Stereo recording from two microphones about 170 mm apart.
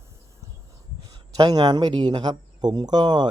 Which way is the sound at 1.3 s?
25° right (ahead or behind).